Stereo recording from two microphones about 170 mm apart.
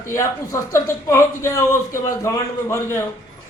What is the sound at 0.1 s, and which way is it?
Speech, 15° left (ahead or behind).